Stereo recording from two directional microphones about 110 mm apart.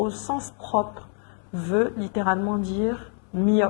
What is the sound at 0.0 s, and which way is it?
Speech, 15° left (ahead or behind).